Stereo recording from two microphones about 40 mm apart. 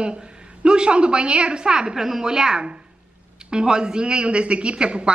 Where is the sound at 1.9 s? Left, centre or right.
Centre.